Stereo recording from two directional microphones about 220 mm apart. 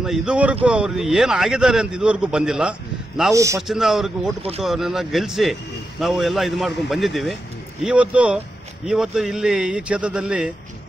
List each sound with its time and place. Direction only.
0.0 s speech: 5° right (ahead or behind)
3.3 s a man's voice: 15° right (ahead or behind)
3.6 s speech: centre (ahead or behind)
4.4 s speech: 25° right (ahead or behind)
4.6 s speech: centre (ahead or behind)